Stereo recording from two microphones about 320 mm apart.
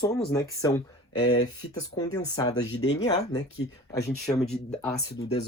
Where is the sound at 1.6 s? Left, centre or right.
Left.